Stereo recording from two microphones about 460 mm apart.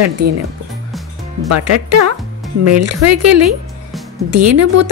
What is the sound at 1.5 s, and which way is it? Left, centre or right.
Speech, right.